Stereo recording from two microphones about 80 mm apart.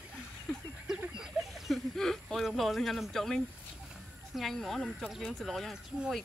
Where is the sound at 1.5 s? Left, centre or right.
Centre.